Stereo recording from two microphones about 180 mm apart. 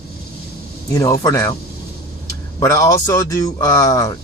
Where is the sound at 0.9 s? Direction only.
15° left (ahead or behind).